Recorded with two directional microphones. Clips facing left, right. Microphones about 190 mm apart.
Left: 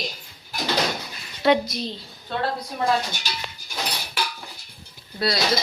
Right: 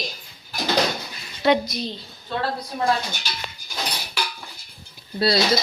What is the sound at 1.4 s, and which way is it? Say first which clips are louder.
Speech: even; centre (ahead or behind).